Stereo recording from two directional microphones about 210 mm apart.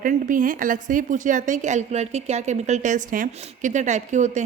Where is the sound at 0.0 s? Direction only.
40° right (ahead or behind).